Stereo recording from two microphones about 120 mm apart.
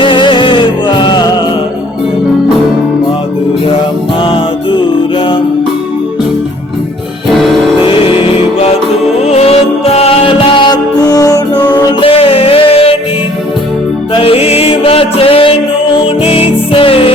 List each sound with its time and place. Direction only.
0.0 s music: 45° left (ahead or behind)
4.3 s music: 45° left (ahead or behind)
7.3 s music: centre (ahead or behind)
7.9 s music: 50° left (ahead or behind)
9.2 s music: 60° left (ahead or behind); by 12.0 s 35° left (ahead or behind)
12.0 s music: 50° left (ahead or behind)
14.1 s music: 50° left (ahead or behind)